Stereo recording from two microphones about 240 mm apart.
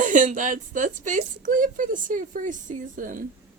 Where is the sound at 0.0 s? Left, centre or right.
Right.